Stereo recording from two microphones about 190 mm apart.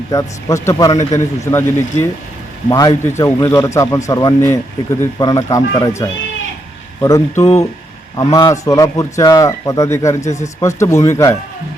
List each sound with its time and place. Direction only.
0.1 s speech: 15° left (ahead or behind)